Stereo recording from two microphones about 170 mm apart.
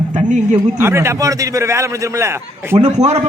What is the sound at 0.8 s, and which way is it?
A man's voice, 15° right (ahead or behind).